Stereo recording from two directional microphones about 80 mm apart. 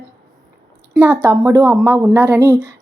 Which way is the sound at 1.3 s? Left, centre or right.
Right.